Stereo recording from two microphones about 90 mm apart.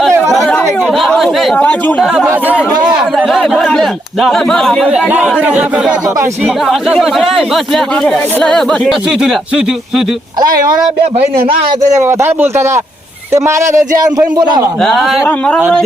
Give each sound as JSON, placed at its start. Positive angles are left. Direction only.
{"t": 0.5, "sound": "chatter", "side_deg": 5}
{"t": 1.5, "sound": "speech", "side_deg": 20}
{"t": 2.0, "sound": "speech", "side_deg": -5}
{"t": 2.3, "sound": "speech", "side_deg": -15}
{"t": 3.2, "sound": "speech", "side_deg": 0}
{"t": 4.9, "sound": "speech", "side_deg": -10}
{"t": 9.0, "sound": "speech", "side_deg": -5}
{"t": 11.9, "sound": "a man's voice", "side_deg": -30}
{"t": 14.8, "sound": "speech", "side_deg": 0}
{"t": 15.3, "sound": "speech", "side_deg": 10}